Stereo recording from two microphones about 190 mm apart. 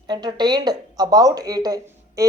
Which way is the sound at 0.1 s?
20° right (ahead or behind).